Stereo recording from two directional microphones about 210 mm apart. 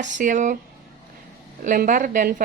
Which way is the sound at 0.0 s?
35° right (ahead or behind).